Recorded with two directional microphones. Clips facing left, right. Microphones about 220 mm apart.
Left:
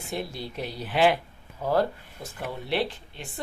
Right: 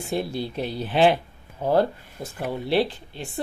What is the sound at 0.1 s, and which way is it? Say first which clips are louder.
Speech: right 6 dB; 30° right (ahead or behind).